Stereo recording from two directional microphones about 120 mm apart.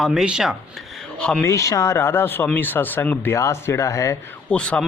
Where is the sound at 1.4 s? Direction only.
25° left (ahead or behind).